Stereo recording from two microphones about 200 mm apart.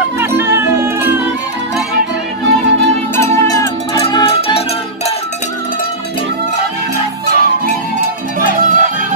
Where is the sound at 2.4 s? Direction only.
65° right (ahead or behind).